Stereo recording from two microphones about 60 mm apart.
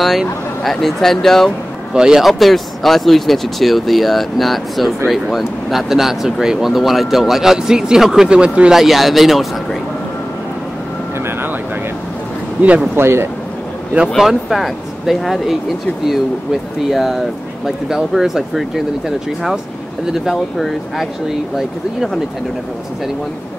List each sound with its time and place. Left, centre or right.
0.7 s speech: centre
2.0 s speech: centre
8.7 s speech: centre
12.9 s speech: right
14.1 s speech: centre
16.9 s speech: centre